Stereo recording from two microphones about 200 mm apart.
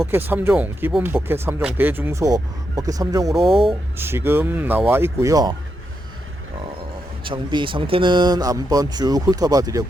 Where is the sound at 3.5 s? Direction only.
30° right (ahead or behind).